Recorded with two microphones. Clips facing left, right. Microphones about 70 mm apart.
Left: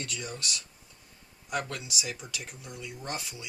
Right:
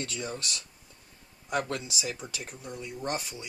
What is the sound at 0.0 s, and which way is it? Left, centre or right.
Speech, right.